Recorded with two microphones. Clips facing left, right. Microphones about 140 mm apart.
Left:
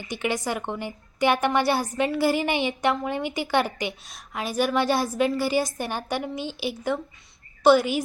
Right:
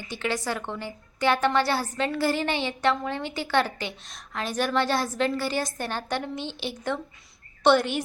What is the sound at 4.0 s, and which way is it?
A woman's voice, centre (ahead or behind).